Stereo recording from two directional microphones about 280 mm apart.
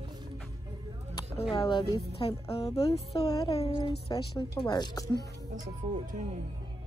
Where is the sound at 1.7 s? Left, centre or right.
Centre.